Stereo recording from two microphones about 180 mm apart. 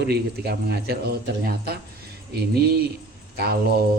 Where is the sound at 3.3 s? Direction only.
60° right (ahead or behind).